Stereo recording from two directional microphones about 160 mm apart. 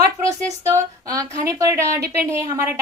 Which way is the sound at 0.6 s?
20° right (ahead or behind).